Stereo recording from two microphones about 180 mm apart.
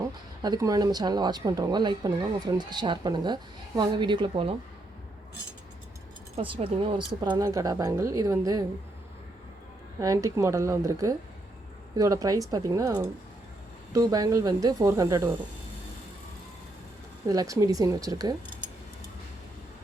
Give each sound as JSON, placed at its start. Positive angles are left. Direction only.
{"t": 0.0, "sound": "speech", "side_deg": -20}
{"t": 6.3, "sound": "speech", "side_deg": -30}
{"t": 10.0, "sound": "speech", "side_deg": -20}
{"t": 17.2, "sound": "speech", "side_deg": -20}